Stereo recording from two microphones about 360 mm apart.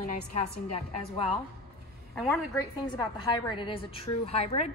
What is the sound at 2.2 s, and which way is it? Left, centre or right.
A woman's voice, centre.